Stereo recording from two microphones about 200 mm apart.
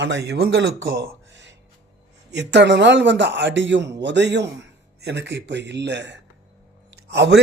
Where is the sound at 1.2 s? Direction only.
65° right (ahead or behind).